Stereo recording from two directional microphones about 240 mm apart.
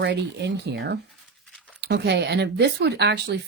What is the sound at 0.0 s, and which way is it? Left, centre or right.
Speech, right.